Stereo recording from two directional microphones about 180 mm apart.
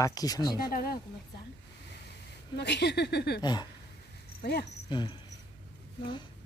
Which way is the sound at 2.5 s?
70° left (ahead or behind).